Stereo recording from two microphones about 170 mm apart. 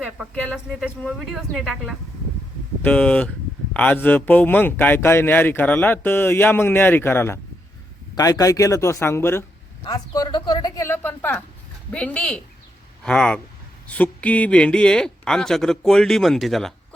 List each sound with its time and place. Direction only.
0.8 s speech: centre (ahead or behind)